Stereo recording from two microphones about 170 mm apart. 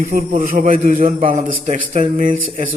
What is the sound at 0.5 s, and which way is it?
Speech, 55° right (ahead or behind).